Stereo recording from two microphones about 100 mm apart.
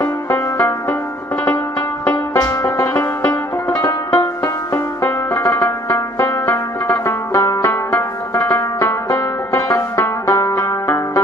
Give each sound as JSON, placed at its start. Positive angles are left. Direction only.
{"t": 0.0, "sound": "music", "side_deg": 25}
{"t": 2.0, "sound": "music", "side_deg": 30}
{"t": 3.8, "sound": "music", "side_deg": 35}
{"t": 4.7, "sound": "music", "side_deg": 25}
{"t": 9.1, "sound": "banjo", "side_deg": 30}
{"t": 9.9, "sound": "music", "side_deg": 30}